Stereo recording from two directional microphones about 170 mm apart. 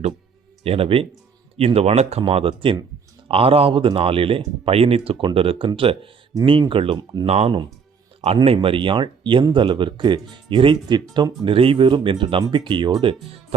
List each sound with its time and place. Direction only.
0.6 s speech: 35° right (ahead or behind)